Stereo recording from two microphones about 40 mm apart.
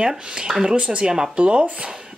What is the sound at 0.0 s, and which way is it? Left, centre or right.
Speech, centre.